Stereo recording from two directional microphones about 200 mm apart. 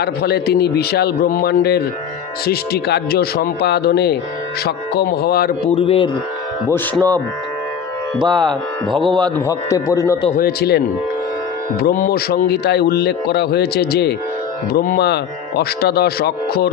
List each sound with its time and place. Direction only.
0.0 s a man's voice: 55° left (ahead or behind)
5.7 s speech: 30° left (ahead or behind)
6.7 s a man's voice: 10° left (ahead or behind)
8.2 s speech: 20° right (ahead or behind)
9.5 s a man's voice: 20° left (ahead or behind)
10.3 s a man's voice: 50° left (ahead or behind)
11.8 s a man's voice: 45° left (ahead or behind)